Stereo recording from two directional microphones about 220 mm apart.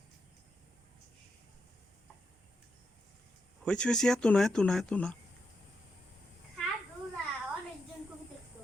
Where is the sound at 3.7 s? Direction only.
5° left (ahead or behind).